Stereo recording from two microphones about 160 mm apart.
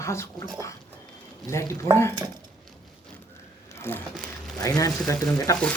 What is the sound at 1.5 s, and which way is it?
Mantra, 20° left (ahead or behind).